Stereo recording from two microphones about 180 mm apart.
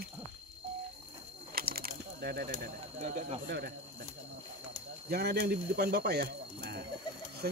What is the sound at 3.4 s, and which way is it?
Speech, 60° right (ahead or behind).